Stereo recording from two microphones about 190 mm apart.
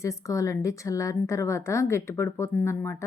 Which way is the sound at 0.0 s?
15° left (ahead or behind).